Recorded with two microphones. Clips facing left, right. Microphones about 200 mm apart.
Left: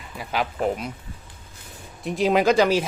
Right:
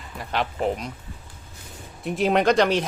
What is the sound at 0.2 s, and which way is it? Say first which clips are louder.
Speech: left 1 dB; 5° left (ahead or behind).